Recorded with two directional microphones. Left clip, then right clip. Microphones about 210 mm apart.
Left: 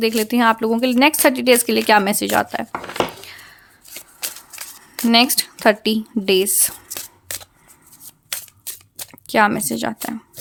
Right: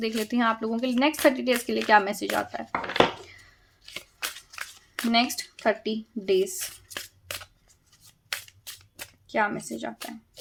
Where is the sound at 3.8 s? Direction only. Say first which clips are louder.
Left 2 dB; 15° left (ahead or behind).